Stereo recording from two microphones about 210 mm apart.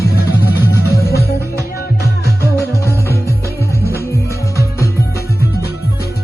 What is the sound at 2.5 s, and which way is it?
Music, 10° left (ahead or behind).